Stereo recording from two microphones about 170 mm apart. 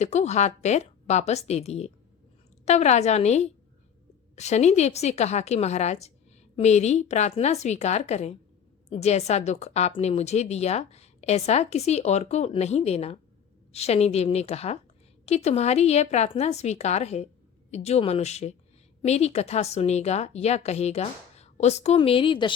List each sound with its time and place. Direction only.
0.0 s a woman's voice: 40° left (ahead or behind)